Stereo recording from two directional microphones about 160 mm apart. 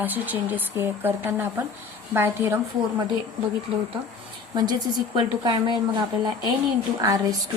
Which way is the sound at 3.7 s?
35° right (ahead or behind).